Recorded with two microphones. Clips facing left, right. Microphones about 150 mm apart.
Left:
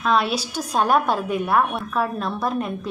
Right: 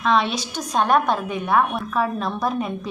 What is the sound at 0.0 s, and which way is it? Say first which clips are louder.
A woman's voice: even; 5° left (ahead or behind).